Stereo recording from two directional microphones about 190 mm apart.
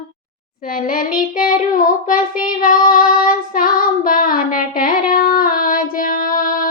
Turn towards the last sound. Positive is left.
turn(degrees=45)  # may be behind; listen again after turning